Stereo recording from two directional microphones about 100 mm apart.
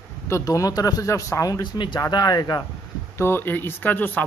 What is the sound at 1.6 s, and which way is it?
Speech, 50° left (ahead or behind).